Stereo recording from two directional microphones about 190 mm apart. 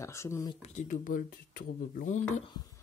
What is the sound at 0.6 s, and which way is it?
Speech, 40° left (ahead or behind).